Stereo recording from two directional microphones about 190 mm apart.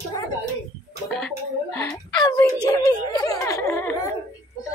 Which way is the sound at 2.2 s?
20° left (ahead or behind).